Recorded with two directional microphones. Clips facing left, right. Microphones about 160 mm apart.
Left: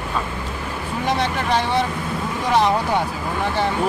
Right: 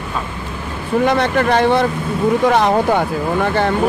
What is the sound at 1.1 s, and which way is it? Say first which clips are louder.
Speech: right 4 dB; 55° right (ahead or behind).